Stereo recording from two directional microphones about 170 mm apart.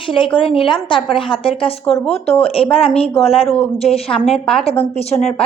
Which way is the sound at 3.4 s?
5° left (ahead or behind).